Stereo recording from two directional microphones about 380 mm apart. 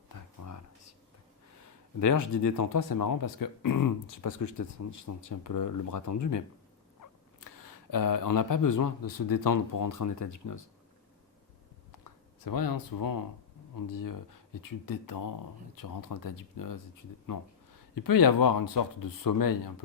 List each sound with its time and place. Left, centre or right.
0.4 s a sound: left
2.0 s speech: left
12.5 s speech: left